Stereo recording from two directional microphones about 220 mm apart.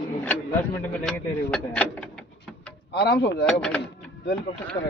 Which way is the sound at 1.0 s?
5° left (ahead or behind).